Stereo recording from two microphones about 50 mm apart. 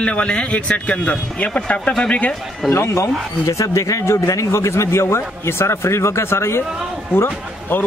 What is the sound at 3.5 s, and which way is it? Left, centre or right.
A man's voice, left.